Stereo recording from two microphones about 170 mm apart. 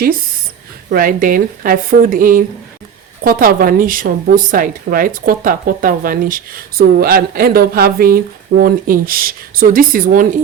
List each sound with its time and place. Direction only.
0.9 s a woman's voice: 55° right (ahead or behind)